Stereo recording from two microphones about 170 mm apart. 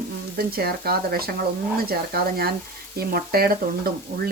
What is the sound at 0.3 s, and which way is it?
Speech, 65° right (ahead or behind).